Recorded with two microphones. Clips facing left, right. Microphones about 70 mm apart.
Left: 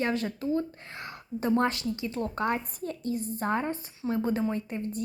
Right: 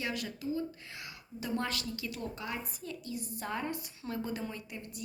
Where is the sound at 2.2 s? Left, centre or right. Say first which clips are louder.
Left 13 dB; left.